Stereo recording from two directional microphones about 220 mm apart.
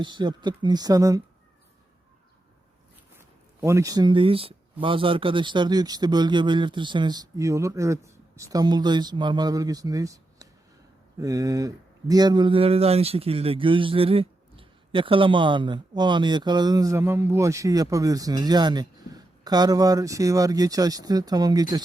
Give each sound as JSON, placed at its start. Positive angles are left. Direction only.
{"t": 0.0, "sound": "speech", "side_deg": -20}
{"t": 3.2, "sound": "speech", "side_deg": -10}